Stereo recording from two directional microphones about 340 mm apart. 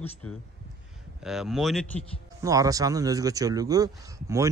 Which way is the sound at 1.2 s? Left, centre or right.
Centre.